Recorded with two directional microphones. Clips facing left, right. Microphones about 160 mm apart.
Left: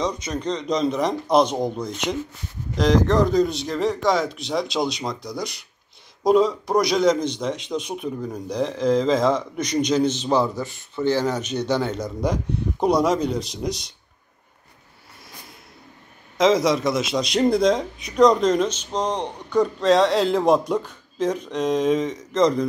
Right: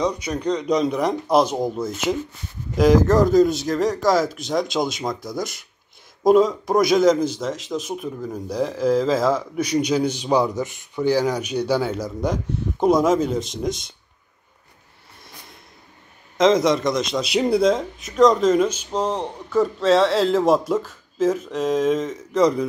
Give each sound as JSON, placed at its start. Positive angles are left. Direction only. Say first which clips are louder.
{"t": 0.0, "sound": "a man's voice", "louder": "right 2 dB", "side_deg": -10}
{"t": 16.3, "sound": "a man's voice", "louder": "right 1 dB", "side_deg": 0}
{"t": 17.3, "sound": "a man's voice", "louder": "even", "side_deg": -5}